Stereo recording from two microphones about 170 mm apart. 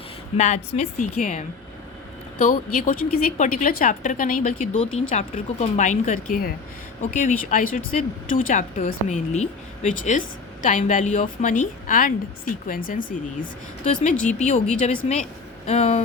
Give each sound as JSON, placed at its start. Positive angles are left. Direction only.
{"t": 0.3, "sound": "a woman's voice", "side_deg": 40}
{"t": 4.8, "sound": "speech", "side_deg": 40}